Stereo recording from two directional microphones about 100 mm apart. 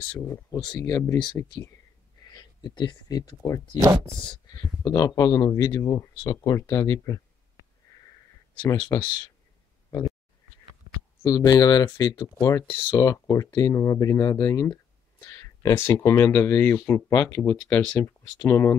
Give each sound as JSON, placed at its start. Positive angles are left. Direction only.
{"t": 0.3, "sound": "speech", "side_deg": 40}
{"t": 1.4, "sound": "speech", "side_deg": 20}
{"t": 2.3, "sound": "speech", "side_deg": 50}
{"t": 3.7, "sound": "speech", "side_deg": -35}
{"t": 4.6, "sound": "speech", "side_deg": 40}
{"t": 8.6, "sound": "speech", "side_deg": 45}
{"t": 11.2, "sound": "speech", "side_deg": 35}
{"t": 14.7, "sound": "a sound", "side_deg": 30}
{"t": 16.3, "sound": "speech", "side_deg": 20}